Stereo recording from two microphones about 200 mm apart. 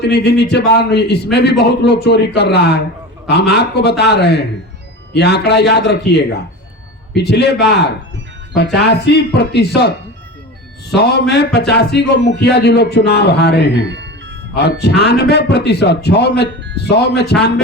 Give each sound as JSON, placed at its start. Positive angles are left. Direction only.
{"t": 0.0, "sound": "a man's voice", "side_deg": 55}
{"t": 10.9, "sound": "a man's voice", "side_deg": 55}
{"t": 13.8, "sound": "music", "side_deg": -60}
{"t": 14.5, "sound": "a man's voice", "side_deg": 55}